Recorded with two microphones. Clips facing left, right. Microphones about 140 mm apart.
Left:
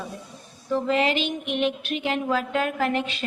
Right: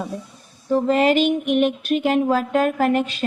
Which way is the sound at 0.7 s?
45° right (ahead or behind).